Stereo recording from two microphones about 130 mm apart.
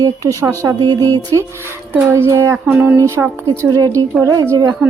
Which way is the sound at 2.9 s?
20° right (ahead or behind).